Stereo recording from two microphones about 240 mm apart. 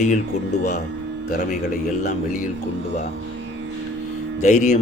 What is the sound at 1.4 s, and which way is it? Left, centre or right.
Speech, left.